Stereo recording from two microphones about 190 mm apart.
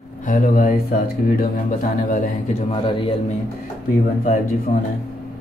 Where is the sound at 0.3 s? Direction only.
45° left (ahead or behind).